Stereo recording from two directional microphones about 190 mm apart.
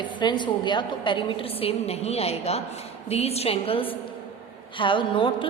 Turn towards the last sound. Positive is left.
turn(degrees=25)  # may be behind; listen again after turning